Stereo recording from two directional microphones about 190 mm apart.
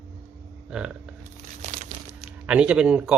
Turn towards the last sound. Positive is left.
turn(degrees=-5)  # may be behind; listen again after turning